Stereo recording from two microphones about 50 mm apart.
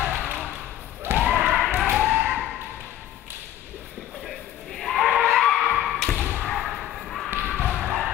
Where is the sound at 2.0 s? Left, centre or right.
Right.